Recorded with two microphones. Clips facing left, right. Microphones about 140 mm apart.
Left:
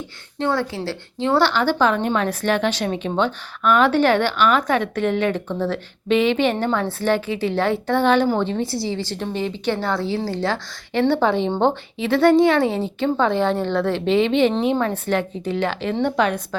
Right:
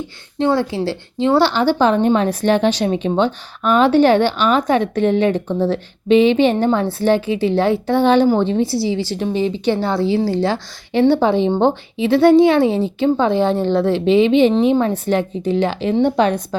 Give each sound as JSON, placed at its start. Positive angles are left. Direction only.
{"t": 0.3, "sound": "a woman's voice", "side_deg": -20}